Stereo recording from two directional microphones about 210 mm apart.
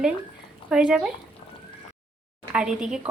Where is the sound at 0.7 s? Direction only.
5° right (ahead or behind).